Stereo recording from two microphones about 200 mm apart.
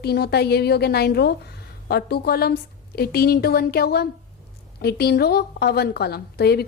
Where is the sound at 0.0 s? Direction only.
55° left (ahead or behind).